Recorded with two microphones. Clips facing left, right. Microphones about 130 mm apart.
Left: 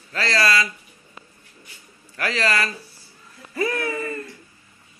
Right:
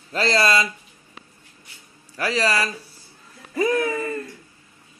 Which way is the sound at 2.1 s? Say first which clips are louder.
Right 1 dB; 10° right (ahead or behind).